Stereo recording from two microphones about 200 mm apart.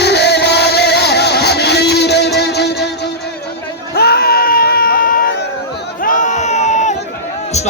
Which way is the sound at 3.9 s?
50° left (ahead or behind).